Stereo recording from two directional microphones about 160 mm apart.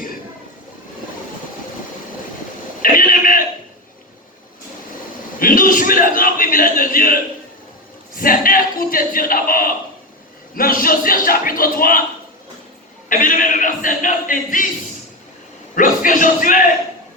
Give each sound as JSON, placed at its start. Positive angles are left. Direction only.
{"t": 2.8, "sound": "a sound", "side_deg": 60}
{"t": 5.4, "sound": "a man's voice", "side_deg": 60}
{"t": 13.1, "sound": "speech", "side_deg": 55}
{"t": 15.7, "sound": "speech", "side_deg": 55}